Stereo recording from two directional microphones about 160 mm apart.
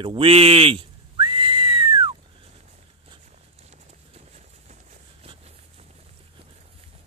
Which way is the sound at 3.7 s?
45° right (ahead or behind).